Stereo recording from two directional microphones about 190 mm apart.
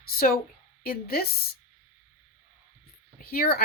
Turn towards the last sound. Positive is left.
turn(degrees=55)  # may be behind; listen again after turning